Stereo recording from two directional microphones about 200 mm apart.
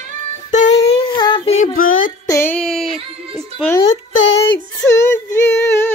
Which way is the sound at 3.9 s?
70° left (ahead or behind).